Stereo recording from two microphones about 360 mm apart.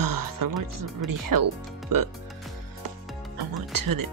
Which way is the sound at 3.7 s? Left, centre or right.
Right.